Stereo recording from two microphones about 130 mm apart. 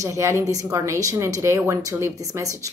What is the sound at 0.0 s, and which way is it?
Speech, 25° right (ahead or behind).